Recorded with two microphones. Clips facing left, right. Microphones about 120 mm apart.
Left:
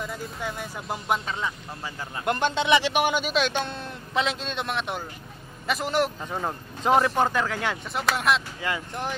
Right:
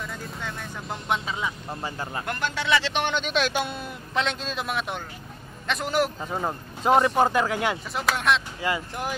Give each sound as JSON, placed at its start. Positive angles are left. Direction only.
{"t": 0.0, "sound": "speech", "side_deg": 5}
{"t": 1.8, "sound": "speech", "side_deg": -35}
{"t": 2.2, "sound": "speech", "side_deg": 25}
{"t": 7.2, "sound": "speech", "side_deg": -10}
{"t": 7.9, "sound": "speech", "side_deg": 0}